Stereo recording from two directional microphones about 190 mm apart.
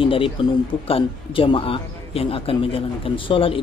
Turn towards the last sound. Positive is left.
turn(degrees=30)  # may be behind; listen again after turning